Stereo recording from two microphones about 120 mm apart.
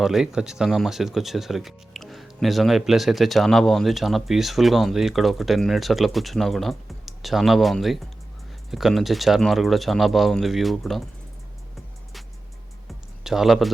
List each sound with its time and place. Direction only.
0.0 s speech: 5° right (ahead or behind)
13.2 s speech: 5° right (ahead or behind)